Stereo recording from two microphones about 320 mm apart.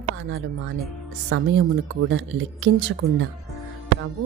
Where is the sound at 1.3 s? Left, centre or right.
Right.